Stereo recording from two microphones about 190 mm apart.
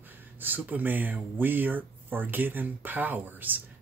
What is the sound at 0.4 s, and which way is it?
Speech, 10° right (ahead or behind).